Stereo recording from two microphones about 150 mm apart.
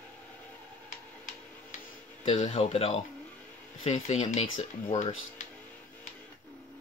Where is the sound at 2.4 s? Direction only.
45° left (ahead or behind).